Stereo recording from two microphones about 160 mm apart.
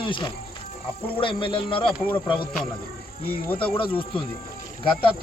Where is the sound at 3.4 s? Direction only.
10° left (ahead or behind).